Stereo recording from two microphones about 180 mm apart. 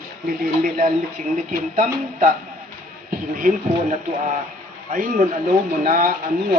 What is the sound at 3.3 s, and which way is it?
Speech, 50° right (ahead or behind).